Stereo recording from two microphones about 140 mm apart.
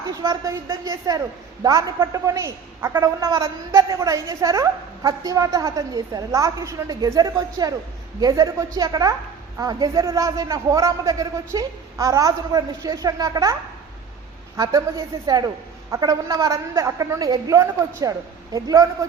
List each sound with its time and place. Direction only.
0.1 s a woman's voice: 25° right (ahead or behind)